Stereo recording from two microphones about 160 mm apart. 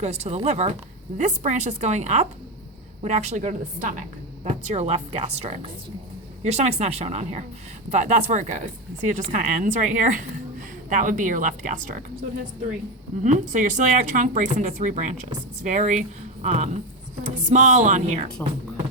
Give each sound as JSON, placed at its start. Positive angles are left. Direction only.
{"t": 0.0, "sound": "speech", "side_deg": -40}
{"t": 13.2, "sound": "speech", "side_deg": -50}